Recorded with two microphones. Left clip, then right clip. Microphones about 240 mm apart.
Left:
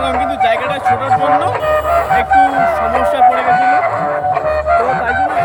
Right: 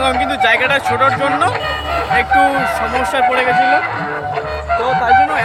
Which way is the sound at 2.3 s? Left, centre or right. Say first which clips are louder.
Left 2 dB; left.